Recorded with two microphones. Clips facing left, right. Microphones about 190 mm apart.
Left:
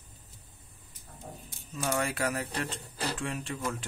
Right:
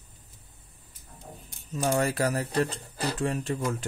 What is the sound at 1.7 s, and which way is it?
Speech, 40° right (ahead or behind).